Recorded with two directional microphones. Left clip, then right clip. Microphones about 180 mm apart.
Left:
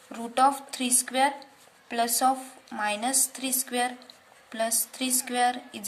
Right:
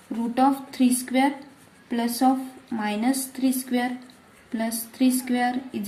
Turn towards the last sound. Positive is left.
turn(degrees=30)  # may be behind; listen again after turning